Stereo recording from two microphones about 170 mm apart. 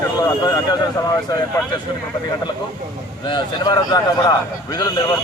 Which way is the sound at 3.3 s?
25° left (ahead or behind).